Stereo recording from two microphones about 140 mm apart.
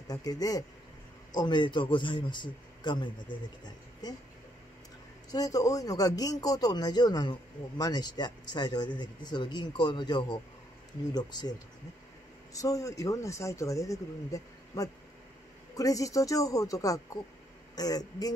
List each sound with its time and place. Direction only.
0.1 s a man's voice: 25° left (ahead or behind)
5.3 s speech: 25° left (ahead or behind)
12.5 s speech: 25° left (ahead or behind)